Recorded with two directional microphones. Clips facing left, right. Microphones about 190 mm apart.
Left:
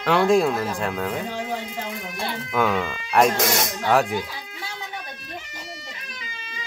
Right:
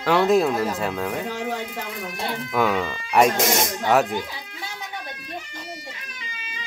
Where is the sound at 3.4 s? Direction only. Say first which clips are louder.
Right 1 dB; 20° right (ahead or behind).